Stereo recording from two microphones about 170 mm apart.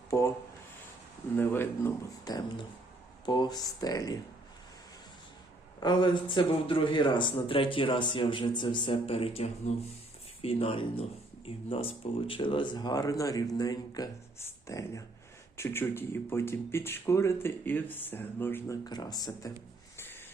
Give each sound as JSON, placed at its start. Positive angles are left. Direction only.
{"t": 0.1, "sound": "speech", "side_deg": 15}
{"t": 1.4, "sound": "a man's voice", "side_deg": 15}
{"t": 5.8, "sound": "a man's voice", "side_deg": 25}
{"t": 18.9, "sound": "a man's voice", "side_deg": 25}
{"t": 20.0, "sound": "a sound", "side_deg": 15}